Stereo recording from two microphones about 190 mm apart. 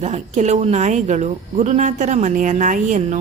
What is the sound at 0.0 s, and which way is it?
A woman's voice, 35° right (ahead or behind).